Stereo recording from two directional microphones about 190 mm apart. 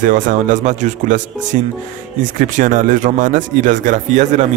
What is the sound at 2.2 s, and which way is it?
Speech, 45° right (ahead or behind).